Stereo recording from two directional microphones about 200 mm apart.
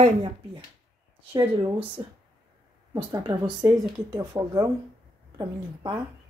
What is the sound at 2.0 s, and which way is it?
Speech, 15° right (ahead or behind).